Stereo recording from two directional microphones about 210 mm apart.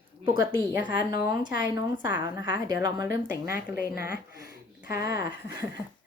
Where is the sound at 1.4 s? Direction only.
20° right (ahead or behind).